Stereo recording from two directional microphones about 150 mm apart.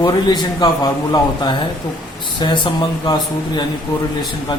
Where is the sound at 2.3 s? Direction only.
30° left (ahead or behind).